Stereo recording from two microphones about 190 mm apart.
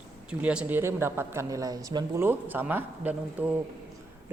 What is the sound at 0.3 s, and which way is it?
Speech, 5° right (ahead or behind).